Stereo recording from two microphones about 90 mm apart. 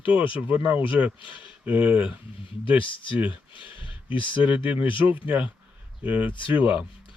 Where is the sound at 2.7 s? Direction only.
70° left (ahead or behind).